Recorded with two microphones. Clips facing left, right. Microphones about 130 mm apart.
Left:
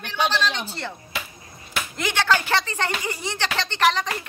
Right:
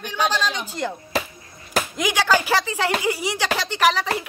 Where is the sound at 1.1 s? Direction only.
40° right (ahead or behind).